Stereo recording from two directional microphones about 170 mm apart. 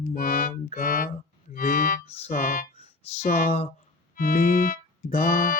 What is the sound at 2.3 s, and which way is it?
Speech, 55° left (ahead or behind).